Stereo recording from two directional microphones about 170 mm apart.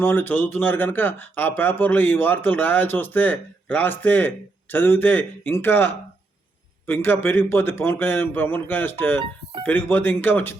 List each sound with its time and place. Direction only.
0.0 s speech: 15° left (ahead or behind)
9.1 s speech: 30° right (ahead or behind)
9.6 s speech: 10° left (ahead or behind)